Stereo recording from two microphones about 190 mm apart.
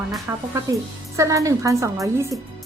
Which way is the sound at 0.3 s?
15° right (ahead or behind).